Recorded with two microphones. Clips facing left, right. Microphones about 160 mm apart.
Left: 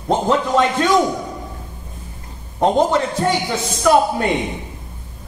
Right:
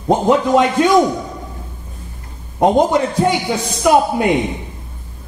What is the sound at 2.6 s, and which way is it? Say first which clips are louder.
Speech: right 3 dB; 15° right (ahead or behind).